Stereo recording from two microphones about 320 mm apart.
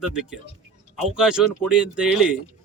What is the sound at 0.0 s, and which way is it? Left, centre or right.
A man's voice, centre.